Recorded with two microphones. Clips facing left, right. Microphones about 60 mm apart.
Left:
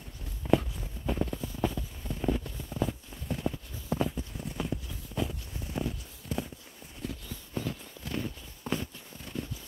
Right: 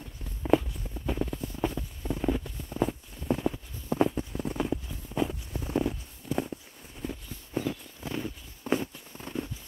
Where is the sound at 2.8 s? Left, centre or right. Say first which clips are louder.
Right 4 dB; right.